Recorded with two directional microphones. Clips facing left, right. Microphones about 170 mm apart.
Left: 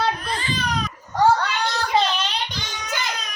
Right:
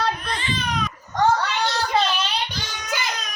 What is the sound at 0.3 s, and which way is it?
Baby cry, 40° left (ahead or behind).